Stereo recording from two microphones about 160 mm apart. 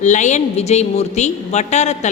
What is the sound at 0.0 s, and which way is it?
A woman's voice, 50° left (ahead or behind).